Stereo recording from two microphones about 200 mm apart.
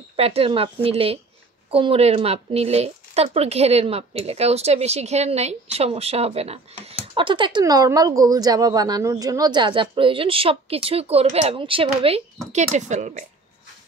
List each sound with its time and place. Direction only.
0.1 s a woman's voice: 30° right (ahead or behind)